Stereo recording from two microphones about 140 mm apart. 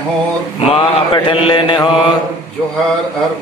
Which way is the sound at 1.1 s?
35° left (ahead or behind).